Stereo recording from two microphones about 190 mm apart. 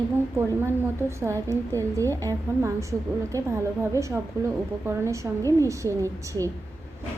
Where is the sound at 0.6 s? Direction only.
10° right (ahead or behind).